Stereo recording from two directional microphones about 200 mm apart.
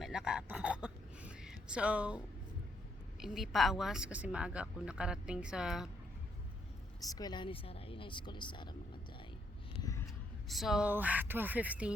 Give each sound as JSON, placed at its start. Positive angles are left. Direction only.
{"t": 0.0, "sound": "a sound", "side_deg": -5}
{"t": 3.2, "sound": "speech", "side_deg": 0}
{"t": 7.0, "sound": "speech", "side_deg": 20}
{"t": 10.5, "sound": "speech", "side_deg": 0}